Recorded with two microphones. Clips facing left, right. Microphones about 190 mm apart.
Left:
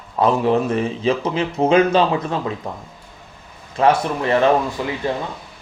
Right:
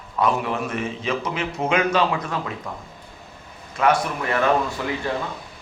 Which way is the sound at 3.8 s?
30° left (ahead or behind).